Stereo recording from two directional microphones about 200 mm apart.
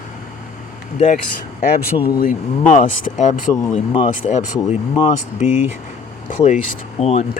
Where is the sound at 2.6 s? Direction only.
35° left (ahead or behind).